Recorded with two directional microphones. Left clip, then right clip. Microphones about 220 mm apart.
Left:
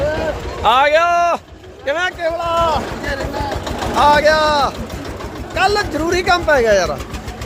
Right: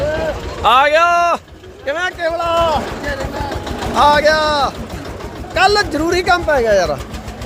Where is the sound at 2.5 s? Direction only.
20° right (ahead or behind).